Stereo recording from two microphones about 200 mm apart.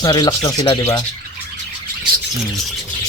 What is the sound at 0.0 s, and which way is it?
Speech, 20° left (ahead or behind).